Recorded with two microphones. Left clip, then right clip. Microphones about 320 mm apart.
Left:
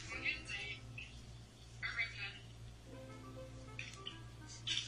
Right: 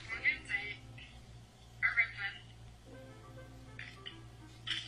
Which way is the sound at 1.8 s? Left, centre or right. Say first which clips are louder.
Right 9 dB; right.